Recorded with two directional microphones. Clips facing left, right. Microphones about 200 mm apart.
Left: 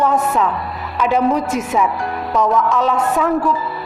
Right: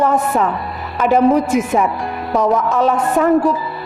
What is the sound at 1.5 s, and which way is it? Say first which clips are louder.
A woman's voice: right 3 dB; 55° right (ahead or behind).